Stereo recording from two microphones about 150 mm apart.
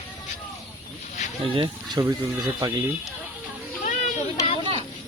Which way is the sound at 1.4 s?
35° right (ahead or behind).